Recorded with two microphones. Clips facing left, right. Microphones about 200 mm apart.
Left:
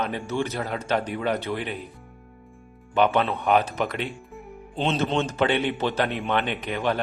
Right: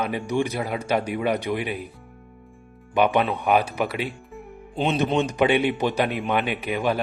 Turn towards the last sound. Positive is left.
turn(degrees=-10)  # may be behind; listen again after turning